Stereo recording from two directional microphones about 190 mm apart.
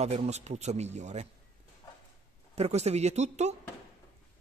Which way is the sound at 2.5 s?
35° right (ahead or behind).